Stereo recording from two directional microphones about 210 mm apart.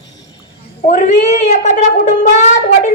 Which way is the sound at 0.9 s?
35° left (ahead or behind).